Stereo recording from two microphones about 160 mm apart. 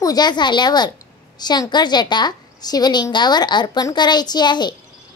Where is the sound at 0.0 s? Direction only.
25° left (ahead or behind).